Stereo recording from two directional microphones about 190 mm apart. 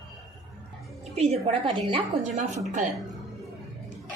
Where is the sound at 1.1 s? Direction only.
35° right (ahead or behind).